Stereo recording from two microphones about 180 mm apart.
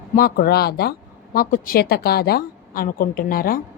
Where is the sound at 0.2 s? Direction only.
55° left (ahead or behind).